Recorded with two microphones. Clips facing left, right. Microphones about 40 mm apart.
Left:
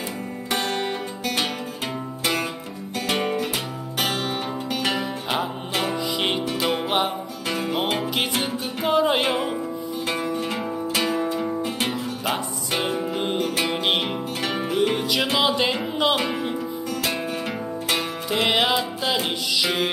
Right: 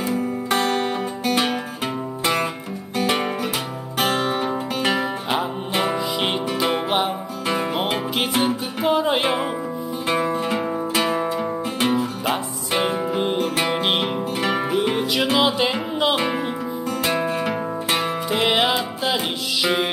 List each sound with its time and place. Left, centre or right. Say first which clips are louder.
2.2 s music: right 3 dB; centre
4.0 s music: right 5 dB; right
4.9 s music: right 3 dB; centre
5.9 s music: right 1 dB; centre
7.4 s music: right 4 dB; right
7.7 s music: right 1 dB; centre; by 11.3 s right
11.3 s music: right 1 dB; centre
14.4 s music: right 4 dB; centre
14.8 s music: right 1 dB; centre
16.2 s music: right 3 dB; right
18.0 s music: right 3 dB; centre